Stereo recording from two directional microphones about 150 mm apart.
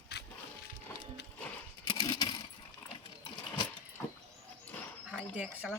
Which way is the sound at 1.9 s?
30° left (ahead or behind).